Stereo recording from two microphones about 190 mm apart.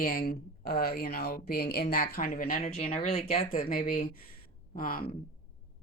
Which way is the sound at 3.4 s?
50° left (ahead or behind).